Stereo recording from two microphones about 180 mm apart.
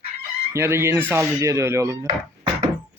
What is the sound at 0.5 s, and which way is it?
Speech, 15° right (ahead or behind).